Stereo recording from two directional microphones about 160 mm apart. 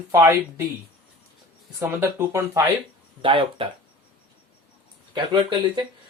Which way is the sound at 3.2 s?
35° right (ahead or behind).